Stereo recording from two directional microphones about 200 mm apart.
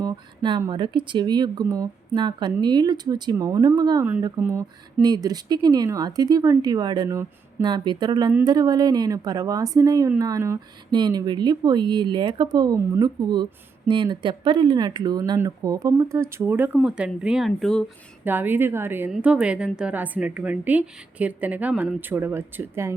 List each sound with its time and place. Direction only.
0.0 s a woman's voice: 20° right (ahead or behind); by 17.8 s centre (ahead or behind)
18.3 s a woman's voice: 10° right (ahead or behind)